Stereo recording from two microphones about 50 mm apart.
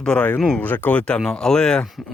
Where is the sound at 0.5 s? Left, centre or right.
Left.